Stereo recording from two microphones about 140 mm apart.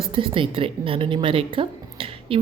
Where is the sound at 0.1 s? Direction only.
40° right (ahead or behind).